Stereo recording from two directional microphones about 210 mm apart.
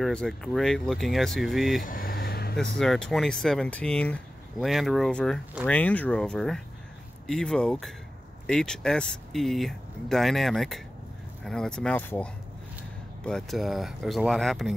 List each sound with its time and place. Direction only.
0.0 s speech: 5° left (ahead or behind)
1.8 s vehicle: 40° left (ahead or behind)
2.5 s speech: centre (ahead or behind)